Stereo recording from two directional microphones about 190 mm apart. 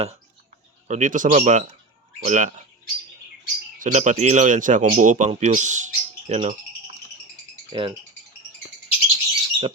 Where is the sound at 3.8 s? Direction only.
40° right (ahead or behind).